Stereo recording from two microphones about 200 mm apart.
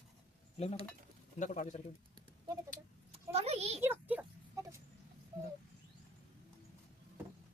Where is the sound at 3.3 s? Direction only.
30° right (ahead or behind).